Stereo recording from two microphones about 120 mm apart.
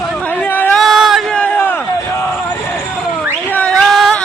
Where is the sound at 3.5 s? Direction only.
10° left (ahead or behind).